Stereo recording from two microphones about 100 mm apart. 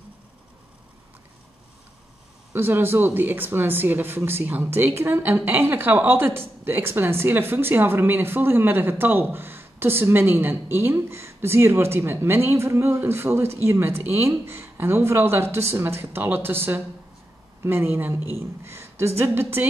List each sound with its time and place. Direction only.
2.5 s speech: 25° right (ahead or behind)